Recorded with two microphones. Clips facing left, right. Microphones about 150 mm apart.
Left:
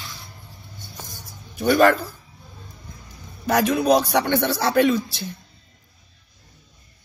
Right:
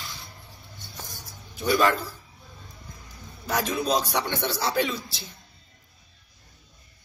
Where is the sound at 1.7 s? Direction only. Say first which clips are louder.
Left 6 dB; 55° left (ahead or behind).